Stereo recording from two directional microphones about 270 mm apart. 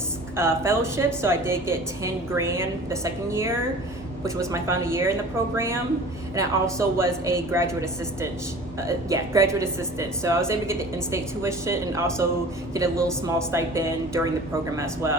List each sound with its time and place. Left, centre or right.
0.3 s a woman's voice: centre